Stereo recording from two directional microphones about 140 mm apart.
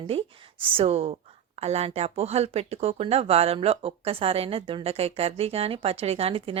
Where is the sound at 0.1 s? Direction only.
40° right (ahead or behind).